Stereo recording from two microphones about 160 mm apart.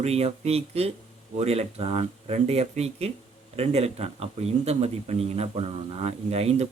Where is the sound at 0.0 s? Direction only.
40° right (ahead or behind).